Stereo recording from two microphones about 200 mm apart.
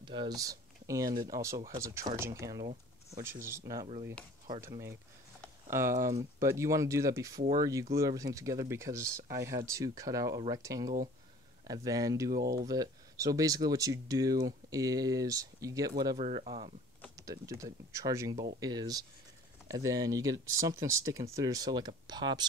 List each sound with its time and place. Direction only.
0.0 s speech: 25° right (ahead or behind)
16.2 s speech: 30° right (ahead or behind)
17.2 s speech: 15° right (ahead or behind)